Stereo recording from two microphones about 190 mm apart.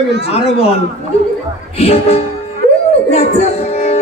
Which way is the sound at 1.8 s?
30° left (ahead or behind).